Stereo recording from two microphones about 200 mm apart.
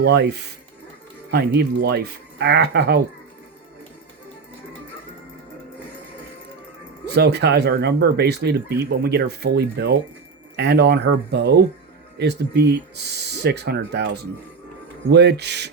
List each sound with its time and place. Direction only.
0.0 s speech: 55° right (ahead or behind)
1.3 s speech: 55° right (ahead or behind)
7.0 s speech: 55° right (ahead or behind)